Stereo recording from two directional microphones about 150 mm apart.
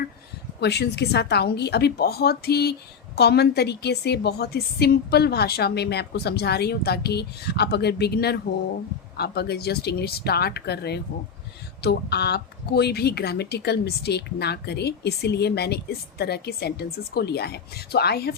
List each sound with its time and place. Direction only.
0.6 s speech: 90° left